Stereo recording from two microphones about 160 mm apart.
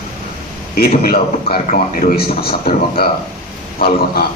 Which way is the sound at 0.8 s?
70° left (ahead or behind).